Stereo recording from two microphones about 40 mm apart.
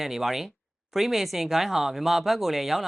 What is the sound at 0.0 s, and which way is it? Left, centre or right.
Speech, centre.